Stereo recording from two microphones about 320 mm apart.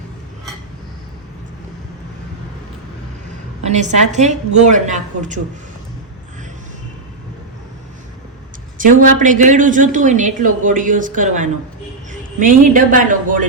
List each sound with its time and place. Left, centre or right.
3.7 s a woman's voice: right
8.8 s a woman's voice: right